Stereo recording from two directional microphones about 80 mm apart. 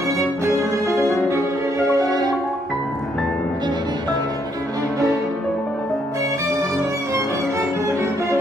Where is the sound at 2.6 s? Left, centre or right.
Centre.